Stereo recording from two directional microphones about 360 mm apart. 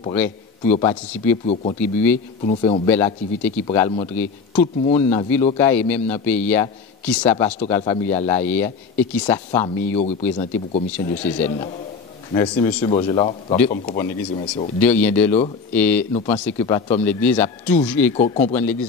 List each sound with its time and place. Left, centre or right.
0.0 s a man's voice: centre
10.9 s a man's voice: centre
18.1 s speech: centre
18.4 s a man's voice: centre